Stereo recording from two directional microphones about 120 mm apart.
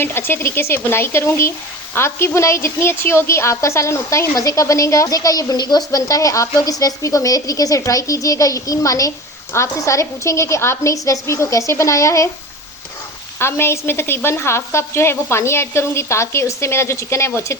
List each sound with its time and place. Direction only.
0.0 s a woman's voice: 20° left (ahead or behind)
13.4 s a woman's voice: 20° left (ahead or behind)